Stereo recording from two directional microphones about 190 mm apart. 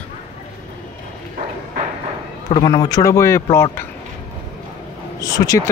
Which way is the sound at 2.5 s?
20° left (ahead or behind).